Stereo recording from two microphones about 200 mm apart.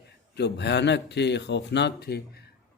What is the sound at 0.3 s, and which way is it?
Speech, 60° left (ahead or behind).